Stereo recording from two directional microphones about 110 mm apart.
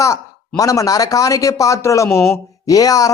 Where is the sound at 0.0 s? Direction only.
30° left (ahead or behind).